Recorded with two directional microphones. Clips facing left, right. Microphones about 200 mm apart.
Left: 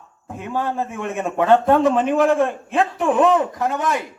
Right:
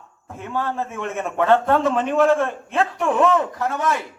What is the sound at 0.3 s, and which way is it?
A man's voice, 15° left (ahead or behind).